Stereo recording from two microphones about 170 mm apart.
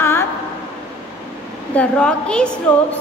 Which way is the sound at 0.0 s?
15° left (ahead or behind).